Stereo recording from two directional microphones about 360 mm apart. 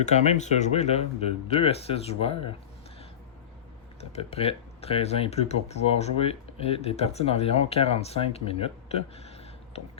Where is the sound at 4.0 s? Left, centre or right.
Centre.